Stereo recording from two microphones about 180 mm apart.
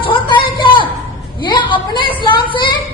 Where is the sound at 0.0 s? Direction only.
25° left (ahead or behind).